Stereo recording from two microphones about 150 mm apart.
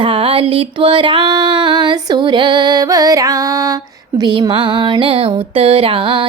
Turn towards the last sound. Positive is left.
turn(degrees=-35)  # may be behind; listen again after turning